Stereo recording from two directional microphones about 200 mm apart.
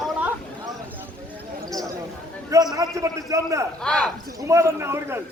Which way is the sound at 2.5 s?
20° right (ahead or behind).